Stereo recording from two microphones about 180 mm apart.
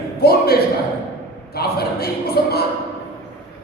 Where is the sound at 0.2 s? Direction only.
60° left (ahead or behind).